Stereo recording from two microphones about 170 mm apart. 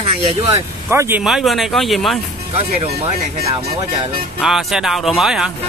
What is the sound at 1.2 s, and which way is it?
Speech, centre (ahead or behind).